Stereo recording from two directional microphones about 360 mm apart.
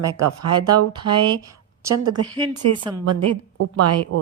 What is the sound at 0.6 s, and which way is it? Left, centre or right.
Speech, centre.